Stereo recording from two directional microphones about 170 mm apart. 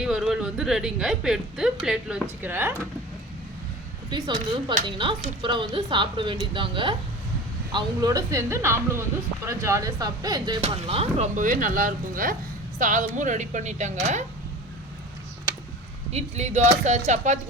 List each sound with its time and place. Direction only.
0.0 s speech: 5° right (ahead or behind)
4.9 s speech: 30° right (ahead or behind)
10.6 s speech: 40° right (ahead or behind)
16.1 s speech: 40° right (ahead or behind)